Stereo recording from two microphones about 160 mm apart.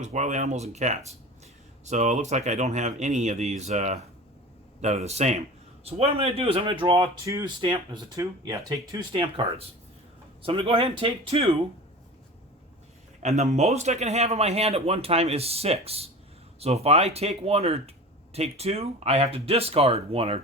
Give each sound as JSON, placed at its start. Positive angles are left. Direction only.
{"t": 0.0, "sound": "speech", "side_deg": -50}
{"t": 10.4, "sound": "speech", "side_deg": -35}
{"t": 13.2, "sound": "speech", "side_deg": -45}